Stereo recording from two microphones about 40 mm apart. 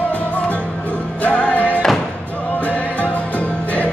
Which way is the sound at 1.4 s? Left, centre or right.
Left.